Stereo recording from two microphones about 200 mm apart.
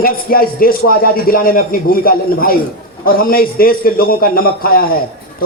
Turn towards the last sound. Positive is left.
turn(degrees=45)  # may be behind; listen again after turning